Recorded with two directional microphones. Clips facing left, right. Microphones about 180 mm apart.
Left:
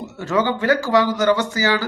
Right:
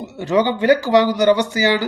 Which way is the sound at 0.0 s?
15° right (ahead or behind).